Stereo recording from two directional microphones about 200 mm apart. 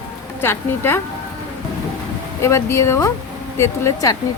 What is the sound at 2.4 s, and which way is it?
Speech, 15° left (ahead or behind).